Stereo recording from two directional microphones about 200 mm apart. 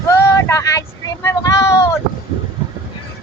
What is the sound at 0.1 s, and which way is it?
Vehicle, 15° left (ahead or behind).